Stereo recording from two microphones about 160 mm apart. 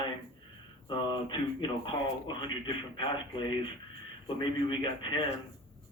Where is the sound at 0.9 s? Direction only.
30° left (ahead or behind).